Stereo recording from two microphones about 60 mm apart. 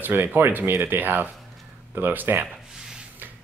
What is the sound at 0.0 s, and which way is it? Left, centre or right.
Speech, right.